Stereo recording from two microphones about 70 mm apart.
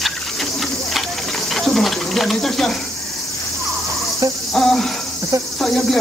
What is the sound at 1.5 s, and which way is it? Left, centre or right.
Insect, centre.